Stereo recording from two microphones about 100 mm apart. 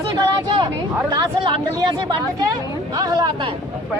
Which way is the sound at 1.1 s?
45° right (ahead or behind).